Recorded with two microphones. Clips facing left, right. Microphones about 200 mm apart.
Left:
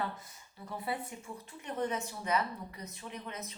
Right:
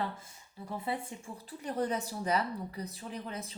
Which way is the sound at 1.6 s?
35° right (ahead or behind).